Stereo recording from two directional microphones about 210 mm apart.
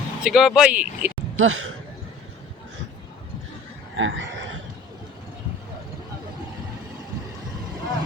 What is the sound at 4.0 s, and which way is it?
Speech, 65° right (ahead or behind).